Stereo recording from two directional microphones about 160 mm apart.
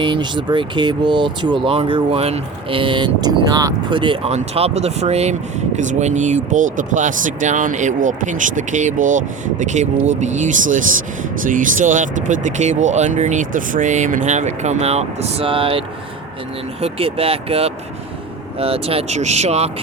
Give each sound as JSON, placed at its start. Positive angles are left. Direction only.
{"t": 0.0, "sound": "speech", "side_deg": -30}
{"t": 16.8, "sound": "speech", "side_deg": -35}